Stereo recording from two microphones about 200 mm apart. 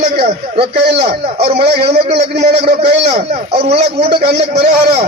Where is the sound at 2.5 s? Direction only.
55° right (ahead or behind).